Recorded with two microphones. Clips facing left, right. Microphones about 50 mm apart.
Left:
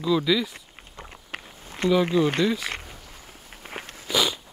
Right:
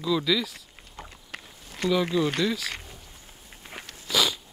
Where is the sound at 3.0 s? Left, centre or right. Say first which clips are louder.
Left 4 dB; left.